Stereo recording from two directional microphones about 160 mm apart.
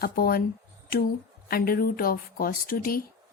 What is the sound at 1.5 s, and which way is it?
Speech, 70° left (ahead or behind).